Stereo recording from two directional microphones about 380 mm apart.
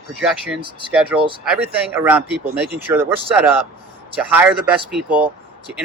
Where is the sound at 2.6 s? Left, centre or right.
Right.